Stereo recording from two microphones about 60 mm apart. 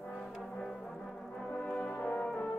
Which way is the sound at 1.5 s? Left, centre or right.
Left.